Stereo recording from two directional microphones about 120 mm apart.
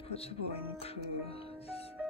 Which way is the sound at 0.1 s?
55° left (ahead or behind).